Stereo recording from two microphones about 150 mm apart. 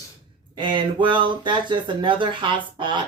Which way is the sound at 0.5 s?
30° right (ahead or behind).